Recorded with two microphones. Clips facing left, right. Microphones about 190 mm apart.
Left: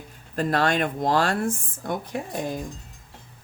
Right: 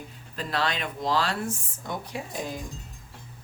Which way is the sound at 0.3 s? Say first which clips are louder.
Left 7 dB; 50° left (ahead or behind).